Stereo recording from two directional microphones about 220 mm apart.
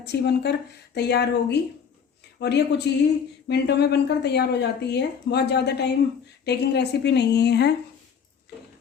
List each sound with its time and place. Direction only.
0.0 s speech: 50° left (ahead or behind)